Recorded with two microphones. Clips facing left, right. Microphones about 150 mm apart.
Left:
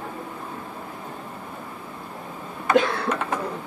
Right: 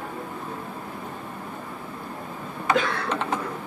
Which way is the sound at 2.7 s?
20° right (ahead or behind).